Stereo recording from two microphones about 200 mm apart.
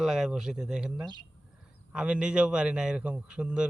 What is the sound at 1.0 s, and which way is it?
Speech, 20° right (ahead or behind).